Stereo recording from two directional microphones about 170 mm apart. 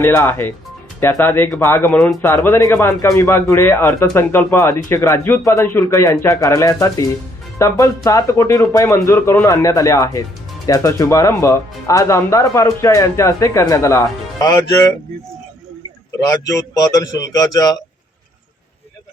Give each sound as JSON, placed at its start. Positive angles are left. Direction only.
{"t": 0.0, "sound": "speech", "side_deg": 10}
{"t": 16.1, "sound": "speech", "side_deg": 20}